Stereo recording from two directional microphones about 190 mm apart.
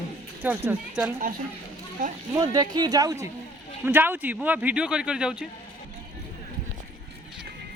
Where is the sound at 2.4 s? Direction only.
20° right (ahead or behind); by 5.4 s 5° right (ahead or behind).